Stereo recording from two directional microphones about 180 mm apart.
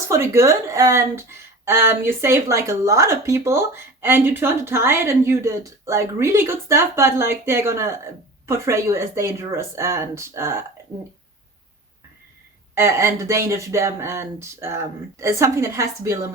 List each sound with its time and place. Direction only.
0.1 s speech: 15° right (ahead or behind)
12.7 s speech: 15° right (ahead or behind)